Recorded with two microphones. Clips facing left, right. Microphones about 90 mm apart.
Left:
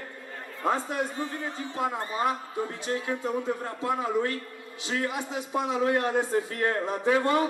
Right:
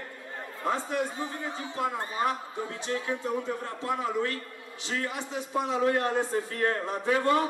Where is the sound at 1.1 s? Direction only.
15° right (ahead or behind).